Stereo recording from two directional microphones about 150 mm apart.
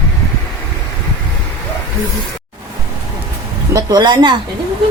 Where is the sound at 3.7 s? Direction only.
30° right (ahead or behind).